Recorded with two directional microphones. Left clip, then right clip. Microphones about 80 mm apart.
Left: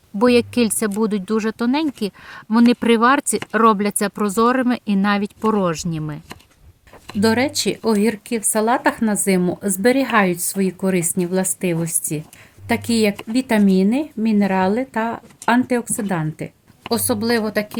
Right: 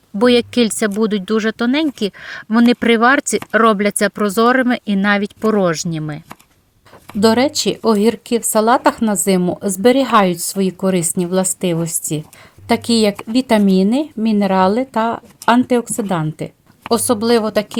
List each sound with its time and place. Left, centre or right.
0.2 s speech: centre
5.5 s speech: centre
7.2 s speech: right
9.4 s speech: right